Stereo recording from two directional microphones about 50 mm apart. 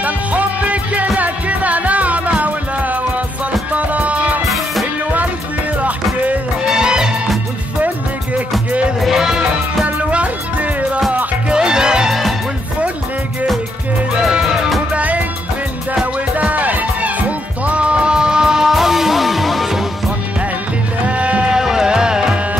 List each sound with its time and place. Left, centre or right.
0.0 s music: right
6.6 s music: centre
9.0 s music: centre
9.8 s music: right
12.1 s music: centre
14.1 s music: centre
15.0 s music: right
16.3 s music: right; by 19.8 s centre
21.1 s music: right
21.5 s music: centre